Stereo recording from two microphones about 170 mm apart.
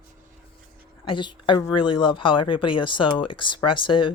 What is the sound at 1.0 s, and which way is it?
Speech, 30° left (ahead or behind).